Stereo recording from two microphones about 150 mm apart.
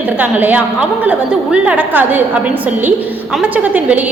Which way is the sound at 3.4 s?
10° right (ahead or behind).